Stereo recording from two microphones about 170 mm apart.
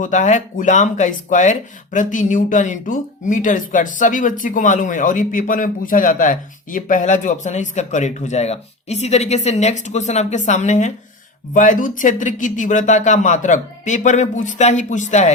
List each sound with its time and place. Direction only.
0.0 s speech: 45° left (ahead or behind)